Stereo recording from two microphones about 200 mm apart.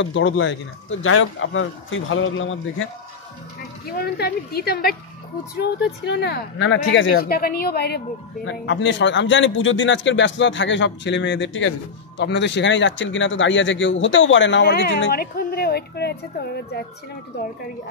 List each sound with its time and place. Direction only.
0.0 s speech: 70° left (ahead or behind)
3.8 s a man's voice: 50° left (ahead or behind)
8.5 s a man's voice: 65° left (ahead or behind)